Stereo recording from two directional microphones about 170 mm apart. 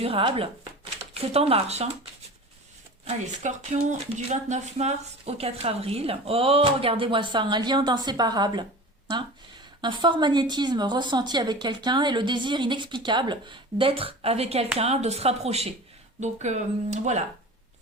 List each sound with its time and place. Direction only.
0.0 s speech: 35° right (ahead or behind)
3.0 s speech: 45° right (ahead or behind); by 8.6 s 25° right (ahead or behind)
9.8 s a woman's voice: 25° right (ahead or behind); by 17.2 s 45° right (ahead or behind)